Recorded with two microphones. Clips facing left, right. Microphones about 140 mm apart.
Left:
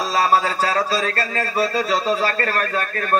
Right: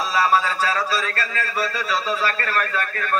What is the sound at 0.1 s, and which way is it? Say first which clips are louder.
A man's voice: left 2 dB; 35° left (ahead or behind).